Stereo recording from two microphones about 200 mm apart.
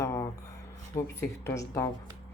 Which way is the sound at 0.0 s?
15° left (ahead or behind).